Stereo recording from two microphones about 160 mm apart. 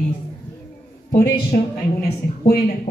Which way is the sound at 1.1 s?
60° left (ahead or behind).